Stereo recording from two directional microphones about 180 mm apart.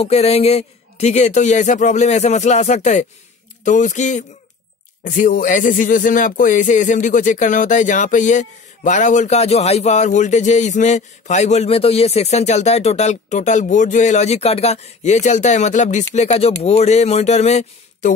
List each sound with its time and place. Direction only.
0.0 s speech: 35° left (ahead or behind)